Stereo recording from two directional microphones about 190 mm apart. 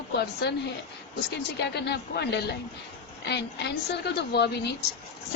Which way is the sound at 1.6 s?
60° left (ahead or behind).